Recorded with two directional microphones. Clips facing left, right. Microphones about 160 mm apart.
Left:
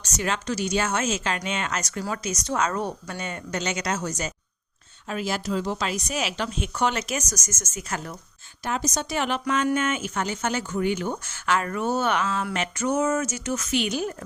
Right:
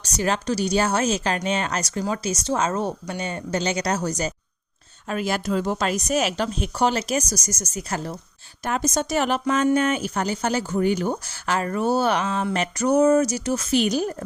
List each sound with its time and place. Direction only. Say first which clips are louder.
0.0 s speech: right 4 dB; 35° right (ahead or behind)
2.0 s a woman's voice: right 6 dB; 25° right (ahead or behind)
5.0 s speech: right 3 dB; 55° right (ahead or behind); by 8.1 s 35° right (ahead or behind)
8.6 s a woman's voice: right 4 dB; 50° right (ahead or behind)